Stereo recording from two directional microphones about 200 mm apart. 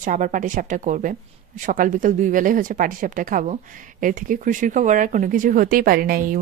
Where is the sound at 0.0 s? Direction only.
40° right (ahead or behind).